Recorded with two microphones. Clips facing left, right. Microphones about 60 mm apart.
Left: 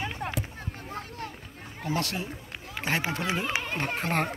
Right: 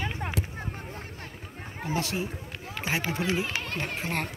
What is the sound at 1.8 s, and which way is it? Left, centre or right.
Speech, centre.